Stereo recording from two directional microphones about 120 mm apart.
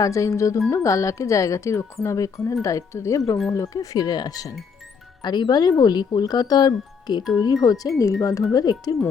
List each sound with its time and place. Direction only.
0.0 s speech: 25° left (ahead or behind)